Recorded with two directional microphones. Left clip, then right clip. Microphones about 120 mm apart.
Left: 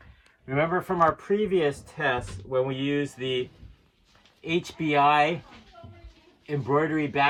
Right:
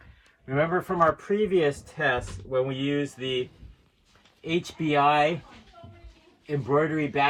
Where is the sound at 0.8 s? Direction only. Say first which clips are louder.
Even; 15° left (ahead or behind).